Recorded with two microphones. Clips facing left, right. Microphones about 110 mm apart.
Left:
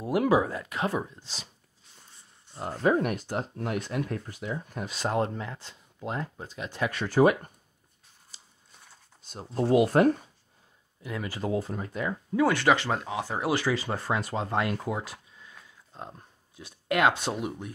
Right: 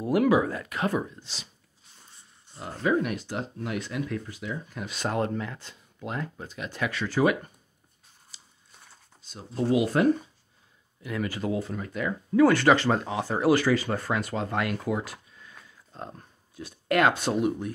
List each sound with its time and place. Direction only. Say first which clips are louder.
0.1 s speech: right 1 dB; 25° left (ahead or behind)
1.2 s speech: left 1 dB; 40° left (ahead or behind)
2.5 s speech: left 1 dB; 40° left (ahead or behind)
6.9 s speech: left 3 dB; 50° left (ahead or behind)
8.3 s biting: left 1 dB; 40° left (ahead or behind)
9.3 s speech: left 1 dB; 50° left (ahead or behind)
11.0 s speech: right 3 dB; 25° left (ahead or behind)